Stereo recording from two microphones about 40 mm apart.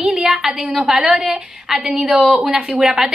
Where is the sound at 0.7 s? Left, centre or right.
Centre.